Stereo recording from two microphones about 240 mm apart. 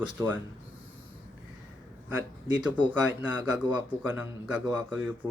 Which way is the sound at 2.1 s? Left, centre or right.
Centre.